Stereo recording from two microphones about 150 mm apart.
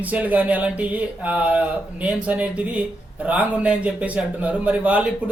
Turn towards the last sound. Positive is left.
turn(degrees=-10)  # may be behind; listen again after turning